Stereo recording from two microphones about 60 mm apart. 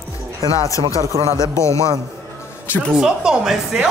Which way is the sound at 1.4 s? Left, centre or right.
Left.